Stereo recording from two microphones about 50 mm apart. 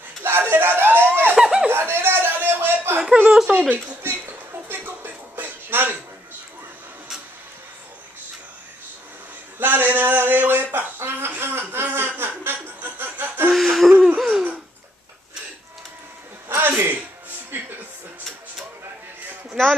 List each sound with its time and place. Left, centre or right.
0.2 s a sound: right
1.3 s laughter: centre
1.7 s chuckle: right
3.3 s speech: centre
3.7 s speech: right
4.6 s music: right
9.6 s speech: right
12.2 s chuckle: right
13.5 s a sound: centre
14.0 s laughter: centre
16.4 s a sound: right
17.5 s music: right